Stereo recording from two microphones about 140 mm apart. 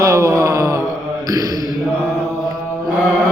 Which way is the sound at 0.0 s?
20° right (ahead or behind).